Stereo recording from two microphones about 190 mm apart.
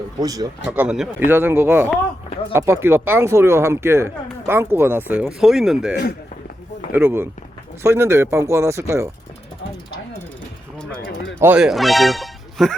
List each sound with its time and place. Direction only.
0.2 s speech: 20° right (ahead or behind)
0.8 s speech: 5° right (ahead or behind)
11.3 s speech: 10° right (ahead or behind)